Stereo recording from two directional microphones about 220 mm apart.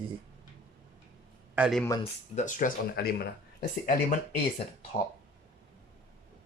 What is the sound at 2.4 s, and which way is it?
Speech, 35° left (ahead or behind).